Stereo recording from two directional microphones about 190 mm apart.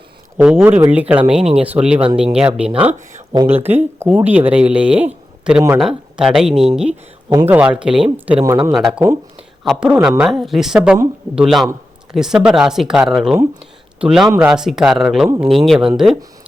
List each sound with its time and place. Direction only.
0.3 s speech: 10° right (ahead or behind)
7.3 s speech: 15° right (ahead or behind)
8.4 s speech: 15° right (ahead or behind)
8.7 s speech: 5° right (ahead or behind)